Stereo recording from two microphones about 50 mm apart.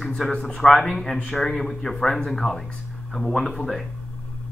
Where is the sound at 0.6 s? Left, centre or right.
Centre.